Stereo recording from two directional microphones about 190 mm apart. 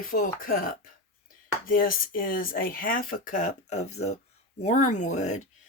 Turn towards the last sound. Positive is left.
turn(degrees=40)  # may be behind; listen again after turning